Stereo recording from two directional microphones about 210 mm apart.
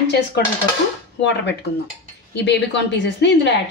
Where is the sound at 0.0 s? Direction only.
50° left (ahead or behind).